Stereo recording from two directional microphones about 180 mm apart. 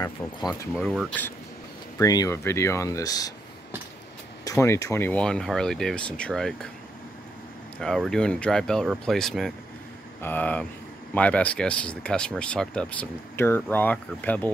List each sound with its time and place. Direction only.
0.5 s speech: centre (ahead or behind)
2.0 s speech: 20° left (ahead or behind)
4.5 s speech: 15° left (ahead or behind)
7.8 s speech: centre (ahead or behind)